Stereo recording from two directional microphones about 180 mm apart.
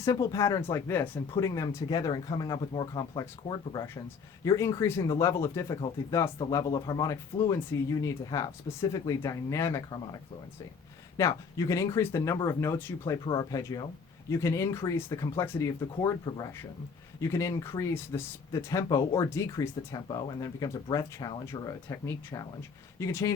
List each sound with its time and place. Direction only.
0.0 s speech: 20° left (ahead or behind)
11.2 s speech: 20° left (ahead or behind)